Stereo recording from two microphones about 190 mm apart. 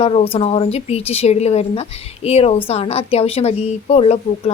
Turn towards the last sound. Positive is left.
turn(degrees=35)  # may be behind; listen again after turning